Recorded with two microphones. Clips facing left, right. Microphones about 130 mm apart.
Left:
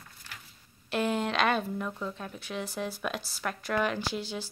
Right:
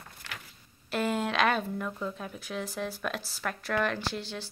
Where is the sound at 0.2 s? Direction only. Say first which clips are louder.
Right 5 dB; 90° right.